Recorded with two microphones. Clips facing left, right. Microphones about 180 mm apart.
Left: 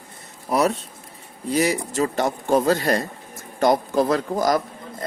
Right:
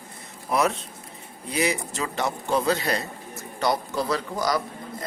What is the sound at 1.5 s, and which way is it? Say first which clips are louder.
Speech: left 5 dB; 45° left (ahead or behind).